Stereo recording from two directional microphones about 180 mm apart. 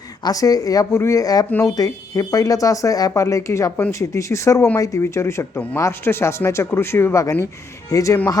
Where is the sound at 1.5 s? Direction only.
10° left (ahead or behind).